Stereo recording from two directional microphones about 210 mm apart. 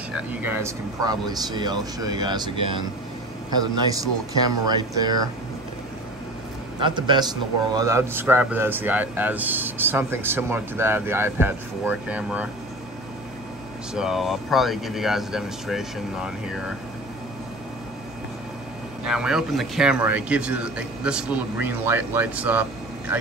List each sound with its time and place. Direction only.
0.3 s speech: 10° right (ahead or behind)
6.8 s speech: 20° right (ahead or behind); by 12.4 s 5° right (ahead or behind)
13.9 s a man's voice: centre (ahead or behind)
19.0 s a man's voice: 5° right (ahead or behind)